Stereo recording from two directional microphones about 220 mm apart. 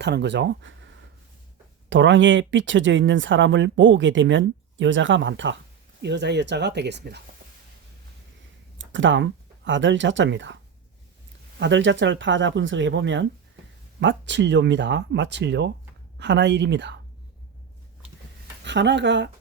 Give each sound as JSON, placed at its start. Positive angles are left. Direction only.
{"t": 0.0, "sound": "speech", "side_deg": -50}
{"t": 1.9, "sound": "speech", "side_deg": -55}
{"t": 8.8, "sound": "speech", "side_deg": -60}
{"t": 11.6, "sound": "speech", "side_deg": -55}
{"t": 18.6, "sound": "speech", "side_deg": -55}